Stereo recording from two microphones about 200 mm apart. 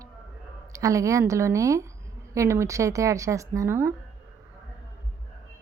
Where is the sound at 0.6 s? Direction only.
15° right (ahead or behind).